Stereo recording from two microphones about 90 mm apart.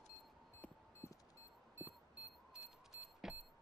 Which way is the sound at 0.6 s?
15° left (ahead or behind).